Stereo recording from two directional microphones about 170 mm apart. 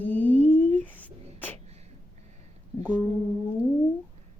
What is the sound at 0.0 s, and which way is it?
Humming, 10° left (ahead or behind).